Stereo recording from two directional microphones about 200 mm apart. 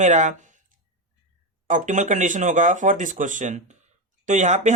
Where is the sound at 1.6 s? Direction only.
40° right (ahead or behind).